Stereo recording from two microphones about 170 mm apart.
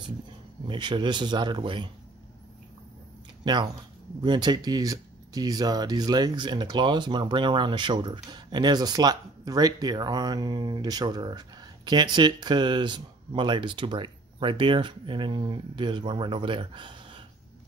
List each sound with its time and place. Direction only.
0.7 s speech: 25° right (ahead or behind)
3.4 s speech: 25° right (ahead or behind)